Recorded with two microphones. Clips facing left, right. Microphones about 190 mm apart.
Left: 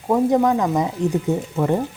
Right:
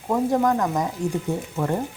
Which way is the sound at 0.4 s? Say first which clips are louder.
Left 3 dB; 5° left (ahead or behind).